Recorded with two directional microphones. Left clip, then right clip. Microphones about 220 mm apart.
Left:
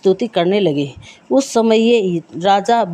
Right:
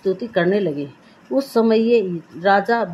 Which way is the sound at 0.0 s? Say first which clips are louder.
Left 5 dB; 35° left (ahead or behind).